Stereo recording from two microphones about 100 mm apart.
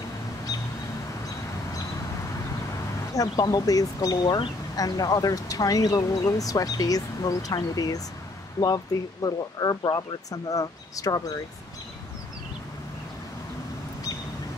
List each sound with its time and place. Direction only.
3.2 s speech: 40° left (ahead or behind)